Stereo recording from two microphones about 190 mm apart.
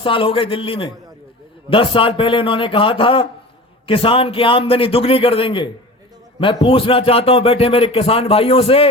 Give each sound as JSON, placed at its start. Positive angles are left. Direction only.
{"t": 0.0, "sound": "speech", "side_deg": 25}